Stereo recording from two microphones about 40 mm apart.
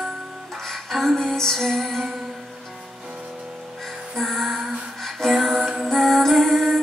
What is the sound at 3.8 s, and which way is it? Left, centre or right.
Music, centre.